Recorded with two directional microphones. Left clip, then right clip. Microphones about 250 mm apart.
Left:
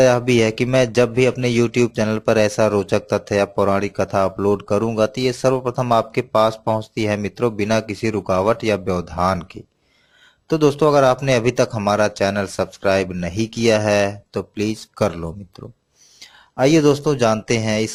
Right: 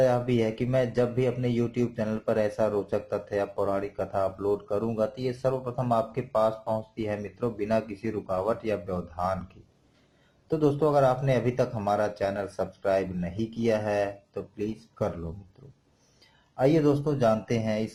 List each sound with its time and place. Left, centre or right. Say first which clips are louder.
0.0 s speech: left 10 dB; left
10.5 s speech: left 9 dB; left
16.6 s speech: left 9 dB; left